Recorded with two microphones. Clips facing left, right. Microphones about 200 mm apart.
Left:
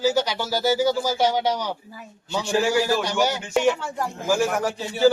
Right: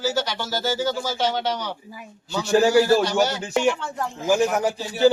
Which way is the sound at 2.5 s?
40° right (ahead or behind).